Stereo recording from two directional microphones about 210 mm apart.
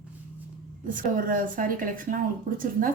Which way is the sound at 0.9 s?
40° right (ahead or behind).